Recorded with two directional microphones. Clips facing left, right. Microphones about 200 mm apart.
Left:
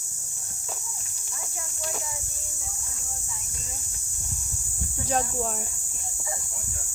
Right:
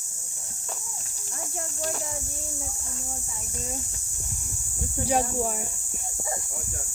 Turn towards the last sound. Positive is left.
turn(degrees=-10)  # may be behind; listen again after turning